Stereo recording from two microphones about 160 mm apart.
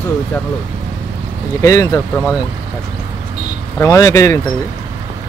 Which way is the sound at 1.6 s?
20° left (ahead or behind).